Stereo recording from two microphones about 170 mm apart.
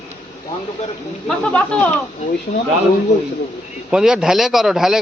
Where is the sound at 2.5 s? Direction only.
40° left (ahead or behind).